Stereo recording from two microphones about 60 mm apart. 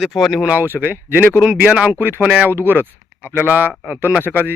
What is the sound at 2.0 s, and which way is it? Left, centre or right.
Speech, right.